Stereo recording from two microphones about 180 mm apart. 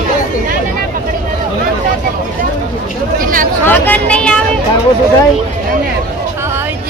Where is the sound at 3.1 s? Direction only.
50° right (ahead or behind).